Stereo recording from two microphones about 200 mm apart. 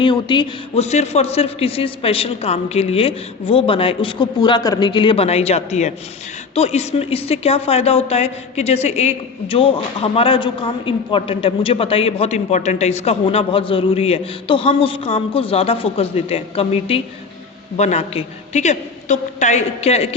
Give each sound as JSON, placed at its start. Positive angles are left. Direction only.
{"t": 0.0, "sound": "a woman's voice", "side_deg": 25}